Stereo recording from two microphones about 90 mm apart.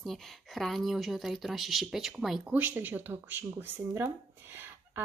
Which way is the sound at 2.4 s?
20° right (ahead or behind).